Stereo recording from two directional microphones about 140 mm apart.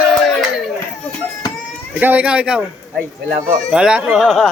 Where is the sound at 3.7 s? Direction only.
5° right (ahead or behind).